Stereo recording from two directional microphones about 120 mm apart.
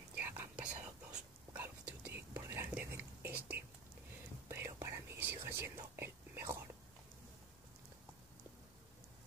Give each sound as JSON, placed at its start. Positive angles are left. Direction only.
{"t": 0.1, "sound": "whispering", "side_deg": -15}